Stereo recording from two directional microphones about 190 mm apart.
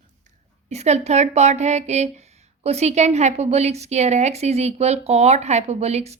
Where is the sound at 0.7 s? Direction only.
35° right (ahead or behind).